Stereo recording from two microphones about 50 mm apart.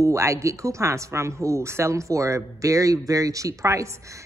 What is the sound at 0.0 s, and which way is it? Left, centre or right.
A woman's voice, right.